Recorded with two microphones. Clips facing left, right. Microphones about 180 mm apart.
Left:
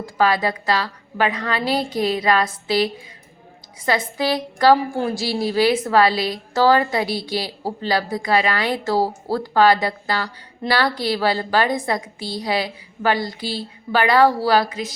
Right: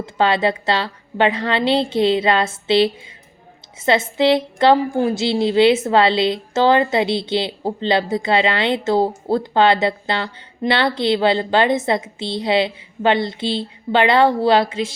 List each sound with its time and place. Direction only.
0.0 s a woman's voice: 25° right (ahead or behind)